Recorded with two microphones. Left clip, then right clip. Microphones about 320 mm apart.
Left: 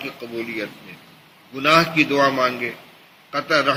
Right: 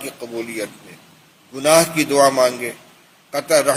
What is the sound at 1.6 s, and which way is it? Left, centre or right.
A man's voice, centre.